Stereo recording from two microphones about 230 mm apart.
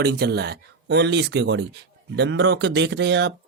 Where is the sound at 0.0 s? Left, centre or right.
Right.